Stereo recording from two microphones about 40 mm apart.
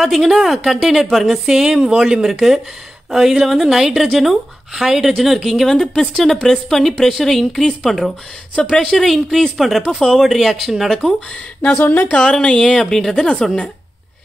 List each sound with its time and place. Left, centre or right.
0.0 s speech: centre
5.7 s a woman's voice: centre
11.8 s speech: left
12.1 s a woman's voice: left